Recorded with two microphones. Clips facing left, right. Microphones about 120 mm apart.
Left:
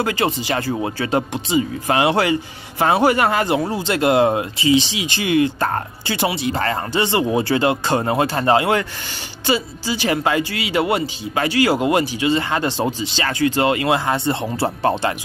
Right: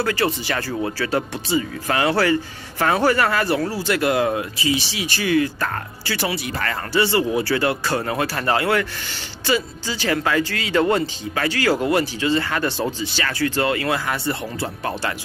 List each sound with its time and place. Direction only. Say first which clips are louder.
0.0 s speech: left 1 dB; 20° left (ahead or behind)